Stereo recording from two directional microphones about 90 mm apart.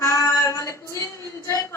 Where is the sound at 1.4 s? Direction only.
35° left (ahead or behind).